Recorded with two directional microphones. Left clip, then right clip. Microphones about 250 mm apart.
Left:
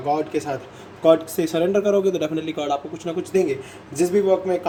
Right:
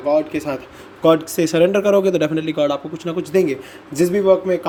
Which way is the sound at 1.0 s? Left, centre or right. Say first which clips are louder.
Right 2 dB; right.